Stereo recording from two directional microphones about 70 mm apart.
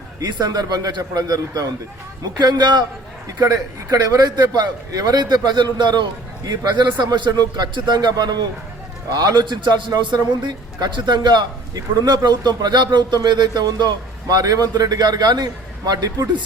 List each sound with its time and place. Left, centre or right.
0.2 s a man's voice: right
2.4 s a man's voice: right
3.2 s a man's voice: right
6.7 s a man's voice: right
9.0 s a man's voice: right
15.9 s speech: right